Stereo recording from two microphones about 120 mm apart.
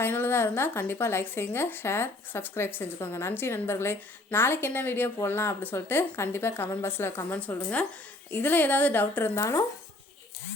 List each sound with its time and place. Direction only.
0.0 s a woman's voice: 20° left (ahead or behind)
9.4 s a woman's voice: 25° left (ahead or behind)